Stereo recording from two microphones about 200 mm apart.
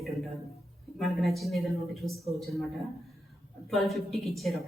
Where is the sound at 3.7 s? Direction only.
Centre (ahead or behind).